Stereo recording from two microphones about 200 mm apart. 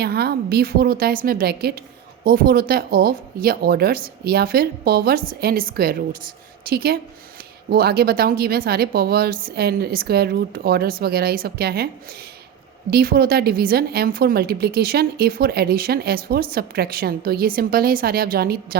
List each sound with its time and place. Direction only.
0.0 s a woman's voice: 55° right (ahead or behind)
12.9 s a woman's voice: 50° right (ahead or behind)